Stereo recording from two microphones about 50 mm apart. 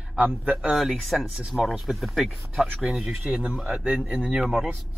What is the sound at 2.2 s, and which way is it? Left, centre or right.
Speech, centre.